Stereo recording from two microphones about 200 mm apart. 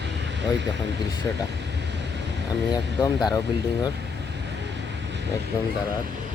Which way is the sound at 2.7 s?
20° left (ahead or behind).